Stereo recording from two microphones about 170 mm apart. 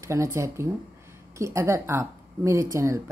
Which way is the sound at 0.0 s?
20° right (ahead or behind).